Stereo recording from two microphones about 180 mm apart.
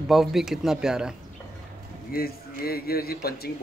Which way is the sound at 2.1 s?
55° left (ahead or behind).